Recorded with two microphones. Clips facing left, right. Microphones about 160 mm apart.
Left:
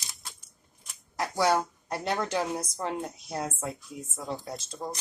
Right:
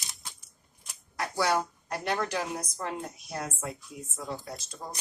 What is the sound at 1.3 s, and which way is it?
A woman's voice, 25° left (ahead or behind).